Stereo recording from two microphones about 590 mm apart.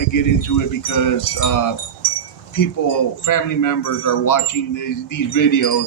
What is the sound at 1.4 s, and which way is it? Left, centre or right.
Speech, left.